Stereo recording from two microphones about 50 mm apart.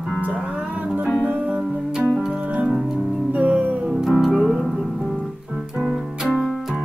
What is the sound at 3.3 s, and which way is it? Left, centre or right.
Music, right.